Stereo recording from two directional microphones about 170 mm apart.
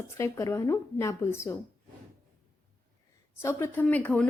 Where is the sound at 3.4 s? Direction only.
15° left (ahead or behind).